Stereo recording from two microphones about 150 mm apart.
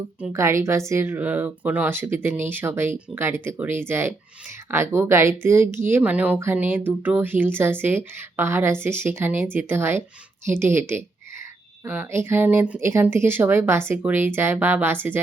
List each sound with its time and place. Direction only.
0.3 s speech: 20° right (ahead or behind)